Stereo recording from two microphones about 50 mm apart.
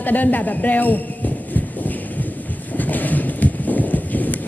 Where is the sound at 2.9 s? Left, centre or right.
Left.